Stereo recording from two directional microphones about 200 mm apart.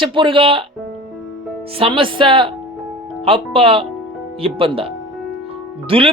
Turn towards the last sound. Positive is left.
turn(degrees=-25)  # may be behind; listen again after turning